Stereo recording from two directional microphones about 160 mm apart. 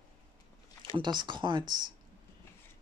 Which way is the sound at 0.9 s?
30° right (ahead or behind).